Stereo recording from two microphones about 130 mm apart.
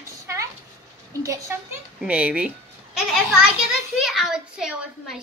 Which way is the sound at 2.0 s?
10° right (ahead or behind).